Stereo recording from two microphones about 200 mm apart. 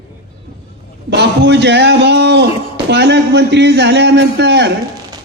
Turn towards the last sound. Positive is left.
turn(degrees=-55)  # may be behind; listen again after turning